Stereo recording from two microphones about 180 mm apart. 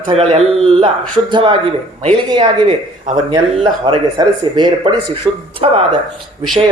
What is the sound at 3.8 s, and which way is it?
A man's voice, 25° right (ahead or behind).